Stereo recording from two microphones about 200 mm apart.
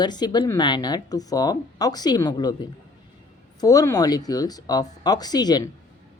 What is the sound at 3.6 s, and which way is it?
A woman's voice, 15° left (ahead or behind).